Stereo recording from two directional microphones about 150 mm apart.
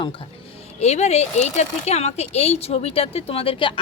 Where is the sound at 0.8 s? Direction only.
45° left (ahead or behind).